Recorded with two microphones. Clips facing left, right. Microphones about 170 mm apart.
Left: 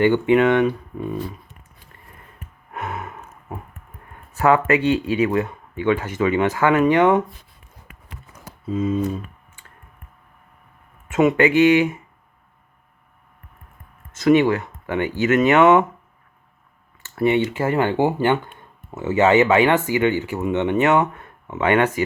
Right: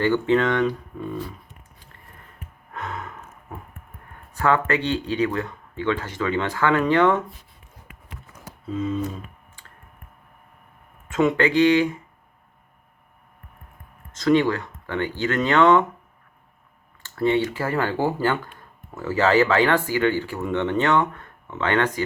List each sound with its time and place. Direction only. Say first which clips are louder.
0.0 s speech: left 4 dB; 15° left (ahead or behind)
2.7 s gasp: left 3 dB; 15° left (ahead or behind)
4.4 s speech: left 5 dB; 10° left (ahead or behind)
8.7 s speech: left 4 dB; 10° left (ahead or behind)
11.2 s speech: left 3 dB; 10° left (ahead or behind)
14.2 s speech: left 3 dB; 15° left (ahead or behind)
17.0 s speech: left 2 dB; 15° left (ahead or behind)